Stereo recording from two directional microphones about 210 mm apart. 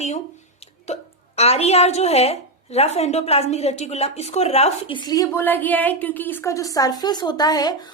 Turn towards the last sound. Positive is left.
turn(degrees=20)  # may be behind; listen again after turning